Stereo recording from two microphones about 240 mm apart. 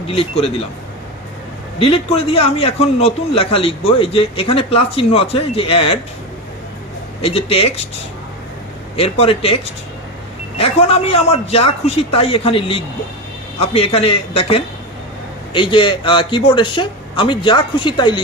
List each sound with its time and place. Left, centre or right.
0.1 s a man's voice: left
1.8 s a man's voice: left
7.2 s a man's voice: left
9.0 s a man's voice: left
10.6 s a man's voice: left